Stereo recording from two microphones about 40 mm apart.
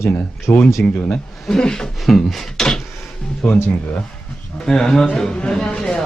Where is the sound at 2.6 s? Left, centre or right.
Centre.